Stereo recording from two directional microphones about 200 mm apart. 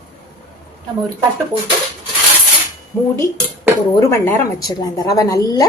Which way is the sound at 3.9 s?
10° left (ahead or behind).